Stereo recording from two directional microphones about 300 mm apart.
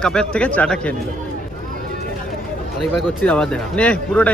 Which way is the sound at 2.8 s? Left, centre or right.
Centre.